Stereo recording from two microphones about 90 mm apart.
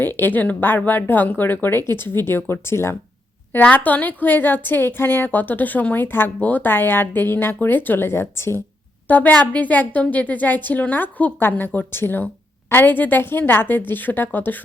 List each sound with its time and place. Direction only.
0.0 s a woman's voice: 25° left (ahead or behind)